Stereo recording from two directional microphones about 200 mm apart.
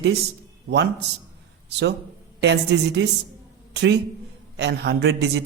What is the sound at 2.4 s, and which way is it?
A man's voice, 60° right (ahead or behind).